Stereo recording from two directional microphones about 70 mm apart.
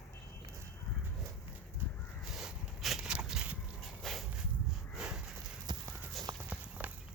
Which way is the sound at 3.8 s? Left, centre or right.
Centre.